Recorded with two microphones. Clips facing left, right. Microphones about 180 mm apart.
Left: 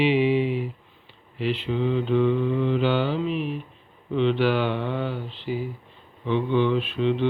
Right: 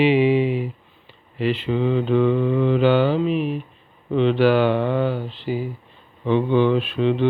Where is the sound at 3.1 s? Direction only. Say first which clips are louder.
Right 5 dB; 60° right (ahead or behind).